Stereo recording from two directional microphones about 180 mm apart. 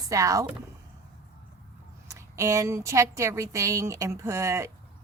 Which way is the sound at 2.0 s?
15° right (ahead or behind).